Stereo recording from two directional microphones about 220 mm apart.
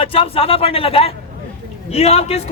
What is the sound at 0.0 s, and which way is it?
Speech, 25° left (ahead or behind).